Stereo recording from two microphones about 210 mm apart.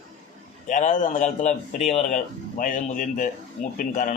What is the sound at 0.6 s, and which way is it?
A man's voice, 35° left (ahead or behind).